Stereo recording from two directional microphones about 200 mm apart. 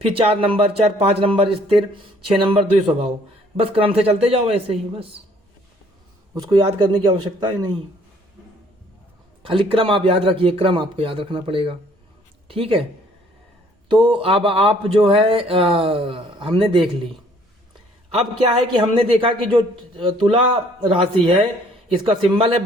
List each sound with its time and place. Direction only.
0.0 s speech: 30° right (ahead or behind)
6.3 s speech: 20° right (ahead or behind)
9.5 s speech: 25° right (ahead or behind)
13.8 s speech: 25° right (ahead or behind)
18.8 s speech: 25° right (ahead or behind)